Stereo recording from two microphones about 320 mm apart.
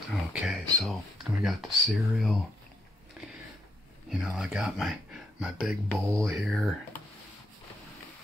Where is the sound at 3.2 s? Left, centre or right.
Centre.